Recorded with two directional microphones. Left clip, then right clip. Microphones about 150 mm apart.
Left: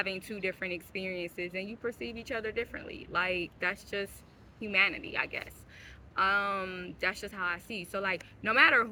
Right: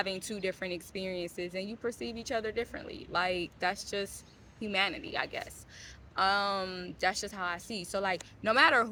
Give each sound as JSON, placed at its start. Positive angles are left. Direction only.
{"t": 0.3, "sound": "a woman's voice", "side_deg": 15}